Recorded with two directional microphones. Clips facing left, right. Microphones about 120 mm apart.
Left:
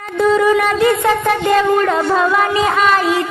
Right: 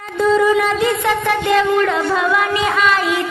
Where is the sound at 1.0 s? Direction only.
40° left (ahead or behind).